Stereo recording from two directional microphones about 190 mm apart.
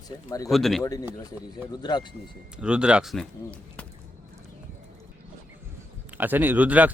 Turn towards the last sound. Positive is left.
turn(degrees=-10)  # may be behind; listen again after turning